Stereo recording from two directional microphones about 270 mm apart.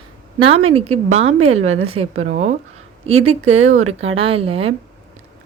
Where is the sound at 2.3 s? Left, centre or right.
Right.